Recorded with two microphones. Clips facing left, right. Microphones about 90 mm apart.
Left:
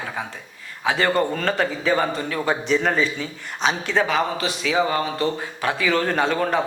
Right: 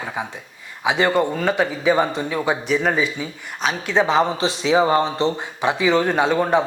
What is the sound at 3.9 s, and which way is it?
Speech, 25° right (ahead or behind).